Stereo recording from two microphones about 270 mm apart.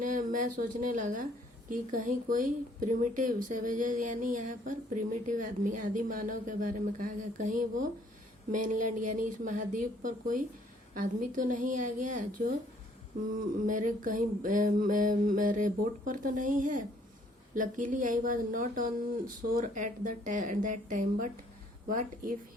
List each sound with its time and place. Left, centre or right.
0.0 s a woman's voice: right
13.7 s speech: right